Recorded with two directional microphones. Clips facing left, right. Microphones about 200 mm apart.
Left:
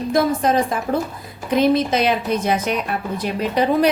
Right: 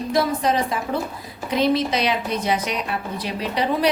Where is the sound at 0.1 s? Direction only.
50° left (ahead or behind).